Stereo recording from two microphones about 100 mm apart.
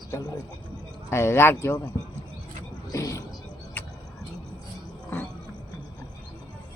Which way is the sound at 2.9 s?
30° left (ahead or behind).